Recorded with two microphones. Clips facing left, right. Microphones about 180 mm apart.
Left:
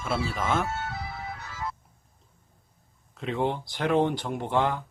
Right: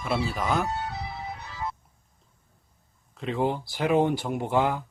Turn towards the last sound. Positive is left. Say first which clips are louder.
# right 1 dB
turn(degrees=-5)  # may be behind; listen again after turning